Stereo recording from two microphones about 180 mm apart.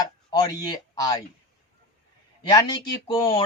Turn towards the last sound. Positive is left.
turn(degrees=25)  # may be behind; listen again after turning